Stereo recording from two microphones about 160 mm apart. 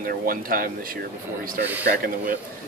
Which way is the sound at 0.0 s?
65° right (ahead or behind).